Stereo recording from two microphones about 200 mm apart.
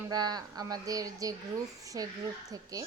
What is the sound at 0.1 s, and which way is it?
Speech, 20° right (ahead or behind).